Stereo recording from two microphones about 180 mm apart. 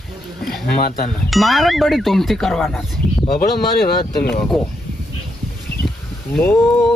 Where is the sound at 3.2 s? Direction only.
55° left (ahead or behind).